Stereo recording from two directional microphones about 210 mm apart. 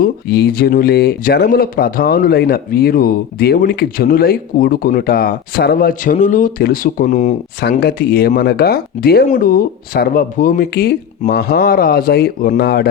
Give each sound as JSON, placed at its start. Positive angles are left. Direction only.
{"t": 0.0, "sound": "speech", "side_deg": 50}
{"t": 7.6, "sound": "speech", "side_deg": 50}